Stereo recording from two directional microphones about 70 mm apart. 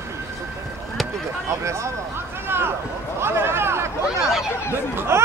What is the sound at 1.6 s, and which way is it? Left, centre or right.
Speech, right.